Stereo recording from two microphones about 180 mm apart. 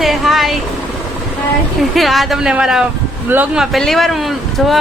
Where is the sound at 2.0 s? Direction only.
Centre (ahead or behind).